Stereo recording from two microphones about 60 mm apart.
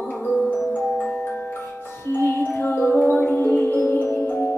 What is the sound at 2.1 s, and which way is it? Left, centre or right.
Music, left.